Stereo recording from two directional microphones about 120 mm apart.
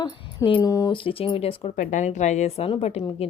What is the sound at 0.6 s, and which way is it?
Speech, 30° left (ahead or behind).